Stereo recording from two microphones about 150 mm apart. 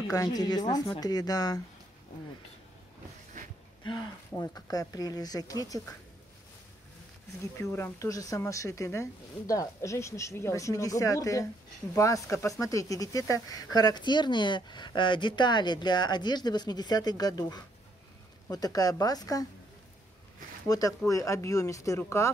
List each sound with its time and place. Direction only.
0.1 s speech: 25° left (ahead or behind)
3.8 s a sound: 30° left (ahead or behind)
4.3 s speech: 25° left (ahead or behind)
7.7 s speech: 20° left (ahead or behind)
20.6 s speech: 25° left (ahead or behind)